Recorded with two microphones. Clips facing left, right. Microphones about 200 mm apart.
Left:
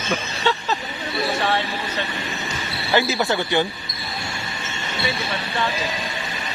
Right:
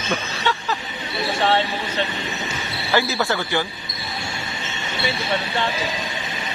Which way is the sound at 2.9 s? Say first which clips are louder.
Left 1 dB; 15° left (ahead or behind).